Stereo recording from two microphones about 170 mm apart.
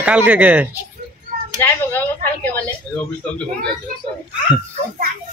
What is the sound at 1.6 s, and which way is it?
Speech, 10° left (ahead or behind).